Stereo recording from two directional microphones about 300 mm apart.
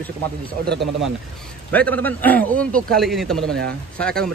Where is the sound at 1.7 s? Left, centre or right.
Centre.